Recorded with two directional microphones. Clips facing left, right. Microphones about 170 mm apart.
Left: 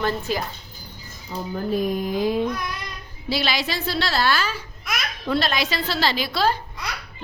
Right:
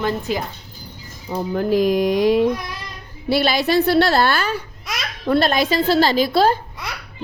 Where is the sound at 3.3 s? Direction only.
55° right (ahead or behind).